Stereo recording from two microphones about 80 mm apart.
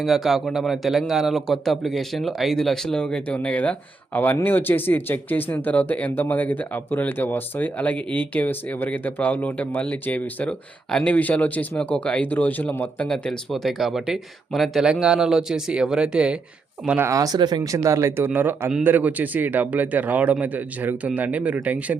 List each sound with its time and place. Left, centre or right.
0.0 s a man's voice: centre
13.1 s speech: centre
17.1 s speech: right
17.6 s a man's voice: right; by 21.9 s centre